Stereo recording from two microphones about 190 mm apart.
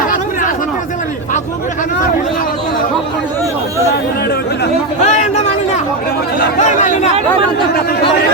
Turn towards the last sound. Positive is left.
turn(degrees=40)  # may be behind; listen again after turning